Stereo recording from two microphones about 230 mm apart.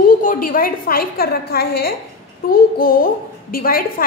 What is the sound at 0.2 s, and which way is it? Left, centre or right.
A woman's voice, left.